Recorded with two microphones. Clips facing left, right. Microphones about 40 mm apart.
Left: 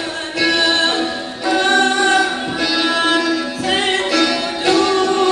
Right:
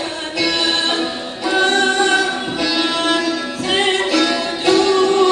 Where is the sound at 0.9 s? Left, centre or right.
Right.